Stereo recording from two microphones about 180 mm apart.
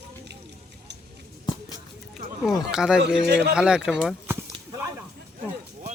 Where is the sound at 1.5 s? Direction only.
20° left (ahead or behind).